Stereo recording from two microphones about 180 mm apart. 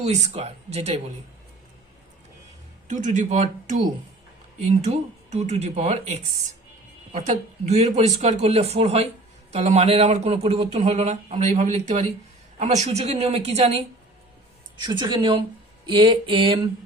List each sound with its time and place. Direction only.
0.0 s speech: 35° right (ahead or behind)
2.8 s speech: 45° right (ahead or behind)
14.8 s mantra: 25° right (ahead or behind)